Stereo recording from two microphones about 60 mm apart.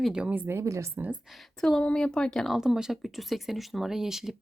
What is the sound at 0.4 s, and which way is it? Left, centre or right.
Speech, right.